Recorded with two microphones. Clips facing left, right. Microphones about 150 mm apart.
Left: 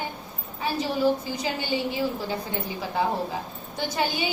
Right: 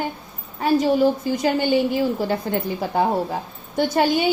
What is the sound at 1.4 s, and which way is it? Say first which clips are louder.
Speech: right 10 dB; 55° right (ahead or behind).